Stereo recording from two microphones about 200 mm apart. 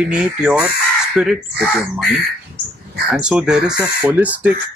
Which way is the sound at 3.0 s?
5° right (ahead or behind).